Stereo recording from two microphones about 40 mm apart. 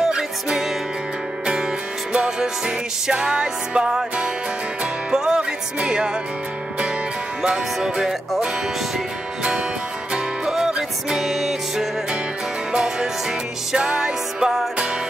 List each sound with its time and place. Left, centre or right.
0.0 s music: centre
7.4 s music: centre
10.1 s music: centre